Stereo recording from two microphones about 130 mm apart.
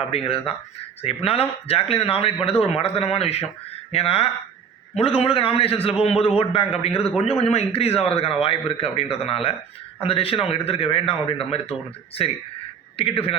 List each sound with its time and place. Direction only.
0.1 s a man's voice: 50° left (ahead or behind)